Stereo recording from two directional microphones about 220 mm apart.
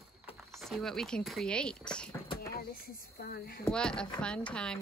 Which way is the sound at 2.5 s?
45° left (ahead or behind).